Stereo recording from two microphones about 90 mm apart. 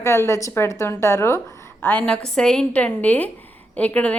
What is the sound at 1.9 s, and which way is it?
A woman's voice, 15° left (ahead or behind).